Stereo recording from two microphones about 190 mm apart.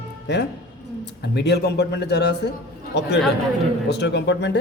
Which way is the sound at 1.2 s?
60° left (ahead or behind).